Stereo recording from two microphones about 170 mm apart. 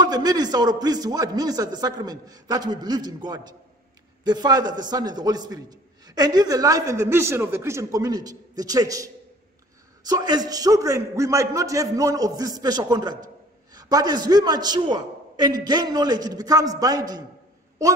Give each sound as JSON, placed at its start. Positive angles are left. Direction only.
{"t": 0.0, "sound": "a man's voice", "side_deg": -25}